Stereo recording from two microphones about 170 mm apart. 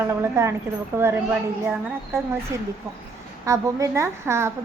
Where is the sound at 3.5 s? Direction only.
20° right (ahead or behind).